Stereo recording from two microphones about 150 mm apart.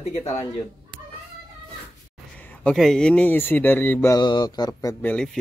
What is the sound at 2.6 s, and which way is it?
Speech, centre (ahead or behind).